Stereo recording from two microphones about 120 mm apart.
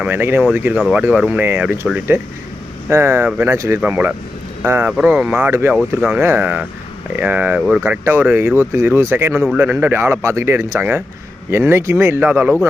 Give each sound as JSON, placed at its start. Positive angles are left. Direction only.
{"t": 0.0, "sound": "speech", "side_deg": -20}
{"t": 5.5, "sound": "speech", "side_deg": -20}
{"t": 7.6, "sound": "speech", "side_deg": 0}
{"t": 7.9, "sound": "speech", "side_deg": -20}